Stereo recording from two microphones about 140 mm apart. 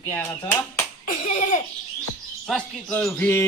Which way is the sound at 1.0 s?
65° left (ahead or behind).